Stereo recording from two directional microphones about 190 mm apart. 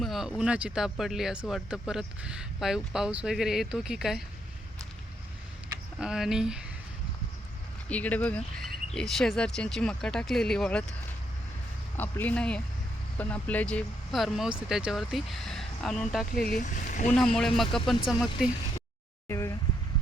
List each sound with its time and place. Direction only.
0.0 s speech: centre (ahead or behind)
6.0 s speech: 5° right (ahead or behind)
7.9 s speech: 5° left (ahead or behind)
11.9 s speech: 10° left (ahead or behind)
16.3 s speech: 50° left (ahead or behind)
17.2 s speech: 5° left (ahead or behind)
19.3 s speech: 15° left (ahead or behind)